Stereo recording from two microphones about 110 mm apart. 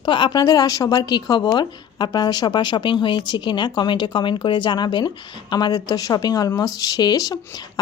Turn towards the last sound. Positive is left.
turn(degrees=35)  # may be behind; listen again after turning